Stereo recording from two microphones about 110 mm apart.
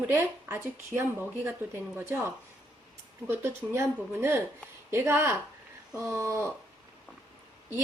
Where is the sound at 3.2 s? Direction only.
25° right (ahead or behind).